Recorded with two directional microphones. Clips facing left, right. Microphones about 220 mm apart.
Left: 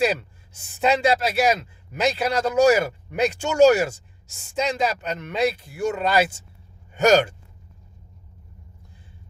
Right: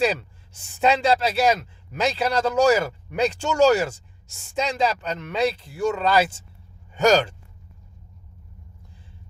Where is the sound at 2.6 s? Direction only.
10° left (ahead or behind).